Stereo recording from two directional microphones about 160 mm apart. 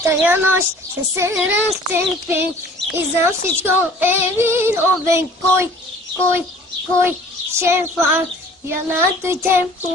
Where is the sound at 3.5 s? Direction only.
15° right (ahead or behind).